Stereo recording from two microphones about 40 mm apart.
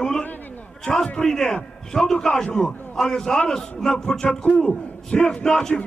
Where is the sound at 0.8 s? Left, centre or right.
Centre.